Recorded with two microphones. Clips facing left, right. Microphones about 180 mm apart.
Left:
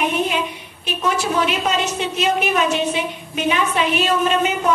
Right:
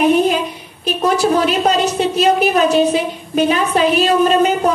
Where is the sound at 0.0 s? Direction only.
35° right (ahead or behind).